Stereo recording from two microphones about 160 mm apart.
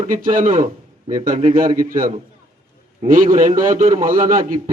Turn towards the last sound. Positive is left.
turn(degrees=-55)  # may be behind; listen again after turning